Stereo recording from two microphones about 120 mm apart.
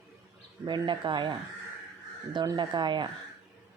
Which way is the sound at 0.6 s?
40° right (ahead or behind).